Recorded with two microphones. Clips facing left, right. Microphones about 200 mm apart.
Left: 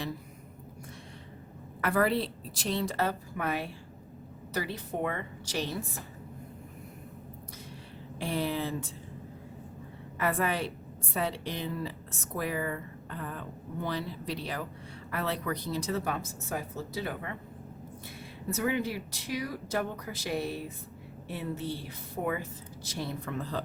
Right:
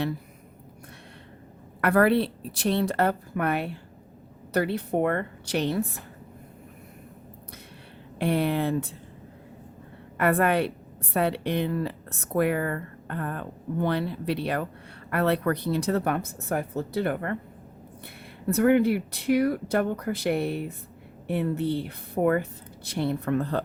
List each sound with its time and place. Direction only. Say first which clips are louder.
1.8 s speech: right 7 dB; 65° right (ahead or behind)
8.2 s speech: right 7 dB; 60° right (ahead or behind)
10.2 s speech: right 7 dB; 60° right (ahead or behind)
18.4 s speech: right 10 dB; 60° right (ahead or behind)